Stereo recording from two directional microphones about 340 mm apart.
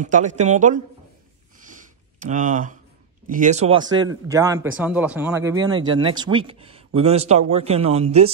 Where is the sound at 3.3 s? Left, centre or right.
Right.